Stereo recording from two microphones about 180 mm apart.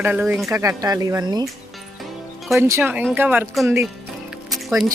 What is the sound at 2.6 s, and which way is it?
Speech, 15° right (ahead or behind).